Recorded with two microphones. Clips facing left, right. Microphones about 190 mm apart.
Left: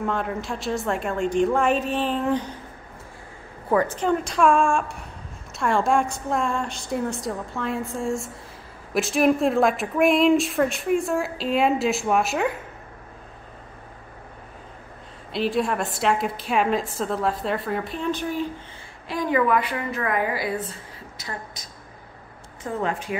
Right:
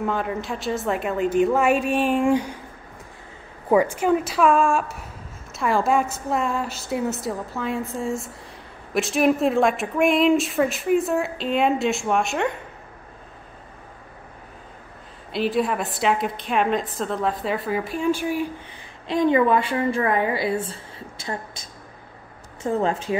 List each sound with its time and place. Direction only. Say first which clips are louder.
0.0 s speech: right 1 dB; centre (ahead or behind)
3.6 s speech: right 3 dB; 10° right (ahead or behind)
15.3 s speech: right 1 dB; centre (ahead or behind)
19.0 s a woman's voice: right 4 dB; 25° right (ahead or behind)